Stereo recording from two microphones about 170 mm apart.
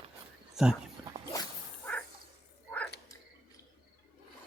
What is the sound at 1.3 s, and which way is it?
Dog, 20° left (ahead or behind).